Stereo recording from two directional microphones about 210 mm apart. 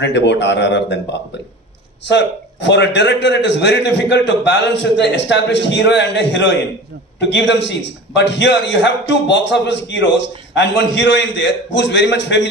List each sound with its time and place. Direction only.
0.0 s a man's voice: 55° left (ahead or behind)
2.0 s a man's voice: 55° left (ahead or behind)